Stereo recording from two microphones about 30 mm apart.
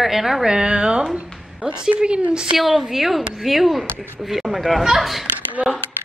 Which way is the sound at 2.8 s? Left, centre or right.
Centre.